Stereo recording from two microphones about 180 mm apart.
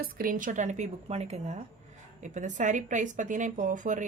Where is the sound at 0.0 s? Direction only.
50° right (ahead or behind).